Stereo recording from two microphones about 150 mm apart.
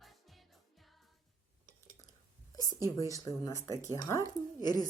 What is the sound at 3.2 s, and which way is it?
Speech, 25° left (ahead or behind).